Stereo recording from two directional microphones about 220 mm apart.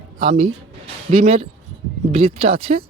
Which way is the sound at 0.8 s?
30° right (ahead or behind).